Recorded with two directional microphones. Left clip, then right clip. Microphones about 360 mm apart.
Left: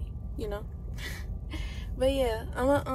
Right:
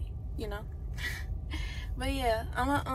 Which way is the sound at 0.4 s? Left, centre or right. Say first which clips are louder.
Left 4 dB; centre.